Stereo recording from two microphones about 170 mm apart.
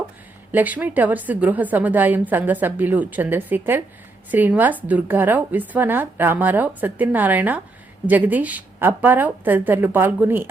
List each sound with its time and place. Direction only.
0.5 s a woman's voice: 10° right (ahead or behind)